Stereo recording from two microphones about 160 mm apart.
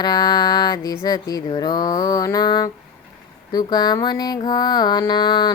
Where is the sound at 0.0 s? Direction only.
25° left (ahead or behind).